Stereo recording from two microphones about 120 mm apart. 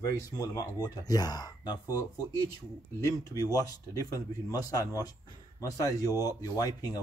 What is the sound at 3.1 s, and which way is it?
A man's voice, 30° left (ahead or behind).